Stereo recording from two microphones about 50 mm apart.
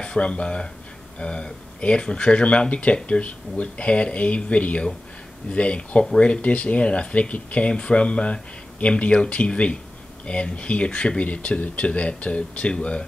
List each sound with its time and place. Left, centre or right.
0.0 s speech: left